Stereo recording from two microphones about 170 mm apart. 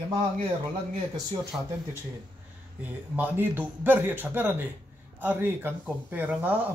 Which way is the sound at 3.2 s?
10° right (ahead or behind).